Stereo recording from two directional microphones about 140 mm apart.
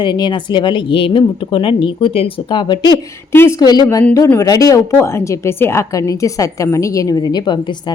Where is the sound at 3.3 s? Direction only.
15° left (ahead or behind).